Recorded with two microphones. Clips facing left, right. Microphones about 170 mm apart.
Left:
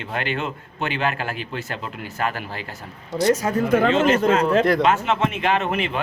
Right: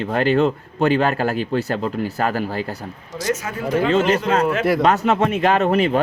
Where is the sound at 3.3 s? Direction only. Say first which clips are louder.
Left 6 dB; 35° left (ahead or behind).